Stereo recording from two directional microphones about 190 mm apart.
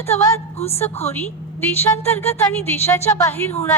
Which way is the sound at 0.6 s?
30° left (ahead or behind).